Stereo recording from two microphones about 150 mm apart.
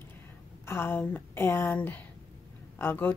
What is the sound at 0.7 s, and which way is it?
Speech, 15° left (ahead or behind).